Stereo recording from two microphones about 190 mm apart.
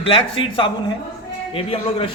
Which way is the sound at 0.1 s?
30° left (ahead or behind).